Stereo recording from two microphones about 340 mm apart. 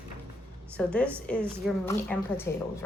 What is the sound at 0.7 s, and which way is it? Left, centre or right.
A woman's voice, centre.